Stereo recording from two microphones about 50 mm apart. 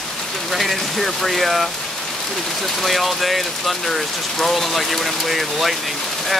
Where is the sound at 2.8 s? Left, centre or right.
Centre.